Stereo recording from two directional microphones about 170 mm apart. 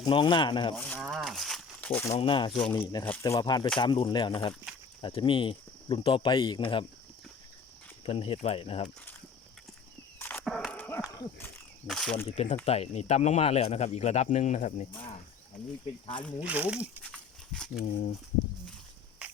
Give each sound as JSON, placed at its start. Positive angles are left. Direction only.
{"t": 0.0, "sound": "speech", "side_deg": 30}
{"t": 0.8, "sound": "speech", "side_deg": 5}
{"t": 1.0, "sound": "crumpling", "side_deg": 0}
{"t": 2.0, "sound": "speech", "side_deg": 35}
{"t": 2.5, "sound": "speech", "side_deg": 5}
{"t": 8.0, "sound": "speech", "side_deg": 35}
{"t": 10.2, "sound": "a sound", "side_deg": 10}
{"t": 11.9, "sound": "speech", "side_deg": 5}
{"t": 12.2, "sound": "speech", "side_deg": 35}
{"t": 14.9, "sound": "speech", "side_deg": 35}
{"t": 16.4, "sound": "speech", "side_deg": -5}
{"t": 17.0, "sound": "a sound", "side_deg": 5}
{"t": 17.8, "sound": "speech", "side_deg": 45}